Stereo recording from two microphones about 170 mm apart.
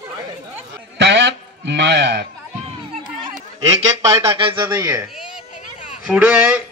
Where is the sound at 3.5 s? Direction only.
20° right (ahead or behind).